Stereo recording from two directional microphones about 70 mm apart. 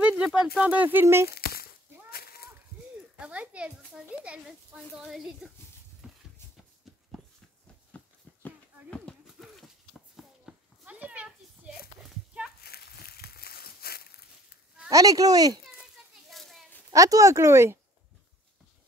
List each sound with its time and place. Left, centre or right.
0.1 s speech: centre
1.0 s speech: right
3.2 s a child's voice: centre
9.2 s a sound: centre
10.9 s a sound: centre
14.9 s speech: right
15.6 s children playing: centre
16.9 s speech: right